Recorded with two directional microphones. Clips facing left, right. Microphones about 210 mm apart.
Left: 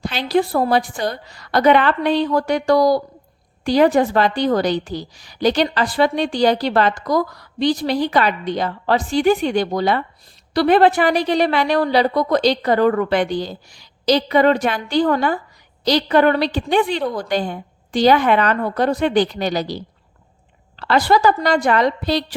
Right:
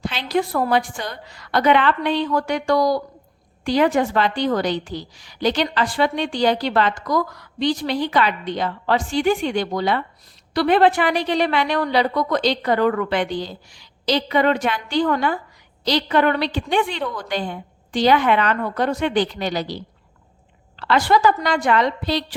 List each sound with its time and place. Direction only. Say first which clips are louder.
0.0 s a woman's voice: left 4 dB; 40° left (ahead or behind)